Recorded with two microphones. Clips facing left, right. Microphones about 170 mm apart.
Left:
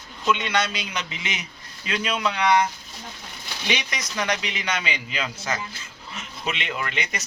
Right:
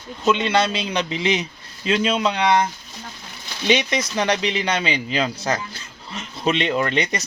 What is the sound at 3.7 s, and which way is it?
A man's voice, 25° right (ahead or behind).